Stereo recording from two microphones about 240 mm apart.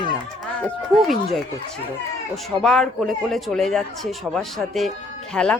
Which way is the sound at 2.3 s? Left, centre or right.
Centre.